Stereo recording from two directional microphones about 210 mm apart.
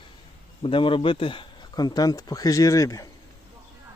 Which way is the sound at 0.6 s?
25° left (ahead or behind).